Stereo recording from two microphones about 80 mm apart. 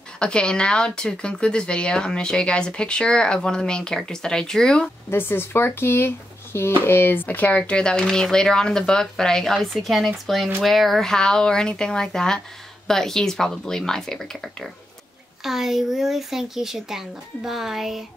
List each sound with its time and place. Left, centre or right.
0.2 s speech: centre
5.1 s speech: left; by 18.0 s centre